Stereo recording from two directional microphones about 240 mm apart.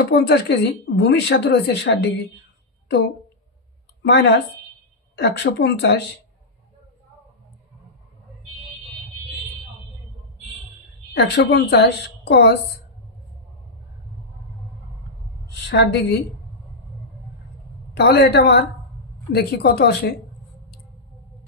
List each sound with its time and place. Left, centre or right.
0.1 s speech: left
4.0 s speech: left
11.1 s speech: left
15.7 s speech: left
17.9 s speech: left